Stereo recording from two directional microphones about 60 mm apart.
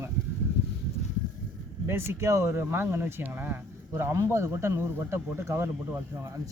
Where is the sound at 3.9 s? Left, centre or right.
Right.